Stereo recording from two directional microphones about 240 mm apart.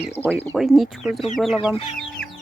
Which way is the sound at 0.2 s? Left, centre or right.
Centre.